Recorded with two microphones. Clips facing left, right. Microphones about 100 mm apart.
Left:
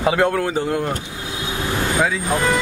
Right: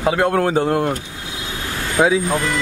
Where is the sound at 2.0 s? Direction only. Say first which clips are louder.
Right 6 dB; 25° right (ahead or behind).